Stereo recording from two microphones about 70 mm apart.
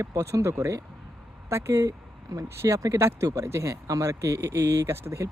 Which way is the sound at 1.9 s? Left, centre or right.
Right.